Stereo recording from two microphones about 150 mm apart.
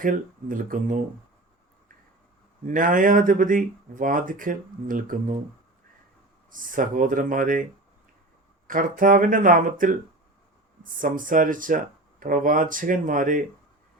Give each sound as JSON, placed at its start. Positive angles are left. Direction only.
{"t": 0.0, "sound": "speech", "side_deg": -65}
{"t": 2.6, "sound": "speech", "side_deg": -65}
{"t": 6.5, "sound": "speech", "side_deg": -65}
{"t": 11.0, "sound": "speech", "side_deg": -65}